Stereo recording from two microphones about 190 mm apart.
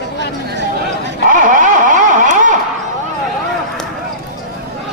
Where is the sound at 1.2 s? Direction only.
40° right (ahead or behind).